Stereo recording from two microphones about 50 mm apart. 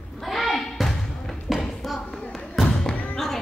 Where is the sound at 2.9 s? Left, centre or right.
Left.